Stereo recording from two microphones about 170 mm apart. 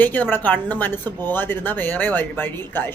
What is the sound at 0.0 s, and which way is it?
A woman's voice, 10° left (ahead or behind).